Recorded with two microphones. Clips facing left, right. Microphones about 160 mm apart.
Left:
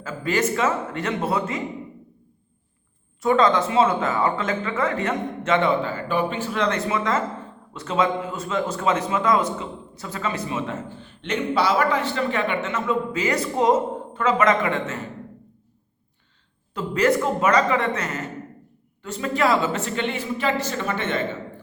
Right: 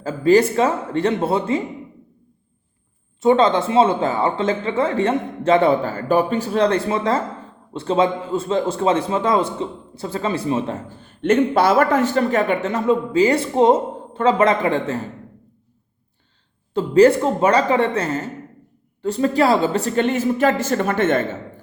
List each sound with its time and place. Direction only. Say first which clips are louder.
0.0 s a man's voice: right 9 dB; 35° right (ahead or behind)
3.2 s a man's voice: right 3 dB; 25° right (ahead or behind)
16.7 s a man's voice: right 8 dB; 30° right (ahead or behind); by 21.2 s 50° right (ahead or behind)